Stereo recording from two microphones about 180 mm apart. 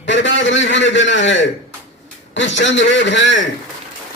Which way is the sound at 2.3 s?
90° left.